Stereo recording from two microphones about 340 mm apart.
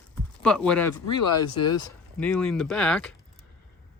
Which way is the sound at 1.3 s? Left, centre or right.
Left.